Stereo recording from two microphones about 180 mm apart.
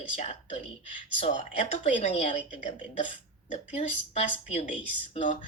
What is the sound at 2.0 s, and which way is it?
Speech, 40° left (ahead or behind).